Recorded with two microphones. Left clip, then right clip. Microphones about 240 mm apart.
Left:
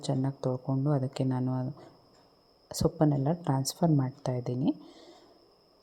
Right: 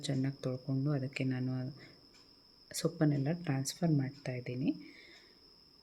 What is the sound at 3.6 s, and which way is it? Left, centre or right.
Speech, centre.